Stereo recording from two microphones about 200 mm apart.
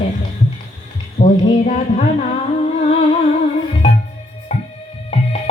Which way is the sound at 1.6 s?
35° left (ahead or behind).